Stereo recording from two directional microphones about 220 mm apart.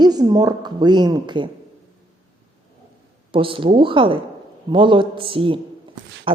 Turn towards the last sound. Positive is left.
turn(degrees=-25)  # may be behind; listen again after turning